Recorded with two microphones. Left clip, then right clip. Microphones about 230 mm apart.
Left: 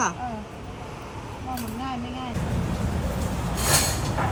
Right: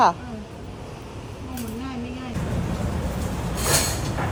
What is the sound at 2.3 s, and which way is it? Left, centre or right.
Music, centre.